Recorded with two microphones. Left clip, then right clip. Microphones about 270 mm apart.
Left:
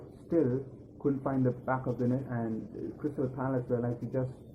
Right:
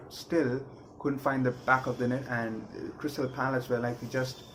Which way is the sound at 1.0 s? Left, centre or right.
Right.